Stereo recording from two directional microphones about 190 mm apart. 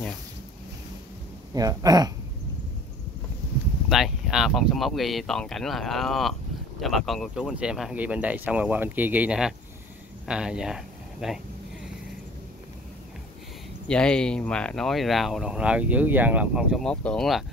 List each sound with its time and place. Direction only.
1.5 s speech: 20° right (ahead or behind)
3.9 s speech: centre (ahead or behind)
13.8 s speech: 5° left (ahead or behind)